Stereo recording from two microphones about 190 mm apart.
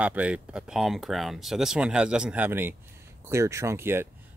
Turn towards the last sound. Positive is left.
turn(degrees=-15)  # may be behind; listen again after turning